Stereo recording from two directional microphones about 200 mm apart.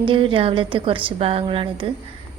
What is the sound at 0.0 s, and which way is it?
A woman's voice, 25° right (ahead or behind).